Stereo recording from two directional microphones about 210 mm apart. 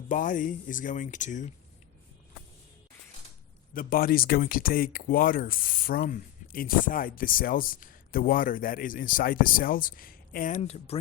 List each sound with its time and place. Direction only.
0.1 s speech: 40° left (ahead or behind)
3.8 s speech: 45° left (ahead or behind); by 11.0 s 30° left (ahead or behind)